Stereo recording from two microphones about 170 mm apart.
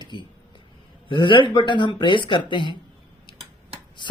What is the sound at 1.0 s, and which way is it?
Speech, 30° left (ahead or behind).